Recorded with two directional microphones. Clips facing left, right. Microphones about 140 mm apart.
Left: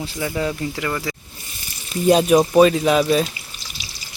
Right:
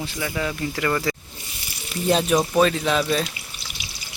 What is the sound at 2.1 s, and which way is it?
Speech, 15° left (ahead or behind).